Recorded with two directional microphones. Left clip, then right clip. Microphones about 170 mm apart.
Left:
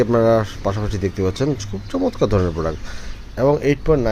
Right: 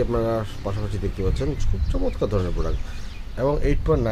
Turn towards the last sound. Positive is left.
turn(degrees=30)  # may be behind; listen again after turning